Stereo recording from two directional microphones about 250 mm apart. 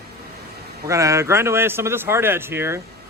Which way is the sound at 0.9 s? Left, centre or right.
Centre.